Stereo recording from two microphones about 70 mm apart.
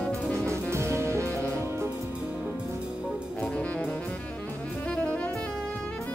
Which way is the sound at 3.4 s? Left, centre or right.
Centre.